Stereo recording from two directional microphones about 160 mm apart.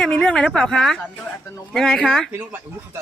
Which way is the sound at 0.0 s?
5° left (ahead or behind).